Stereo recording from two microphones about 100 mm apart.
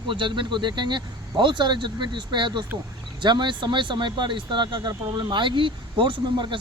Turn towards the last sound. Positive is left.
turn(degrees=-55)  # may be behind; listen again after turning